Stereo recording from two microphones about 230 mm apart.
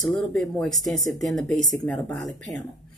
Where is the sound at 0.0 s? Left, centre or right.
Centre.